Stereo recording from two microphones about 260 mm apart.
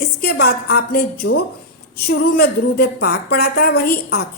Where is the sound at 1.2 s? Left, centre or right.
Left.